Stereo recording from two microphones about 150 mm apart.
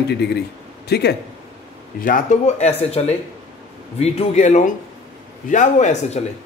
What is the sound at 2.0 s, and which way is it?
A man's voice, 60° left (ahead or behind).